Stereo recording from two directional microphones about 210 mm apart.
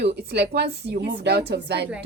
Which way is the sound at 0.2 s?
50° right (ahead or behind).